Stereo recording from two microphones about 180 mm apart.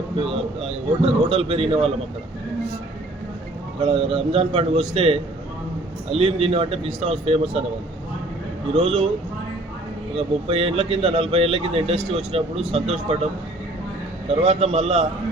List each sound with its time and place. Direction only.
0.2 s speech: 30° right (ahead or behind)
3.8 s speech: 30° right (ahead or behind)
8.7 s speech: 30° right (ahead or behind)
10.2 s speech: 35° right (ahead or behind)
14.3 s speech: 35° right (ahead or behind)